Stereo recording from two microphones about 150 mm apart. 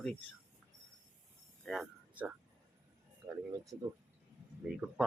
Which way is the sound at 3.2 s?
20° right (ahead or behind).